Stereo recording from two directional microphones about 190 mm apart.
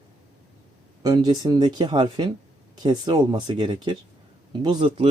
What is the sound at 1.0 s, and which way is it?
Speech, 20° right (ahead or behind).